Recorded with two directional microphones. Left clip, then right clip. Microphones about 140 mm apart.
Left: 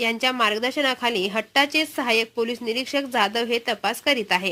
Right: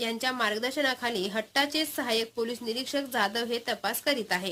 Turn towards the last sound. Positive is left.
turn(degrees=25)  # may be behind; listen again after turning